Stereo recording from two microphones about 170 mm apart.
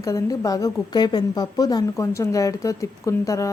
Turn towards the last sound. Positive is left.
turn(degrees=20)  # may be behind; listen again after turning